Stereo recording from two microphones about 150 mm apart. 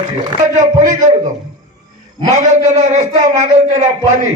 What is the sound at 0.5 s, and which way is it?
Speech, 55° right (ahead or behind).